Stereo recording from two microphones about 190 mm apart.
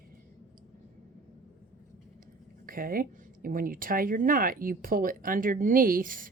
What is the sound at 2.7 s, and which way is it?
Speech, 50° right (ahead or behind).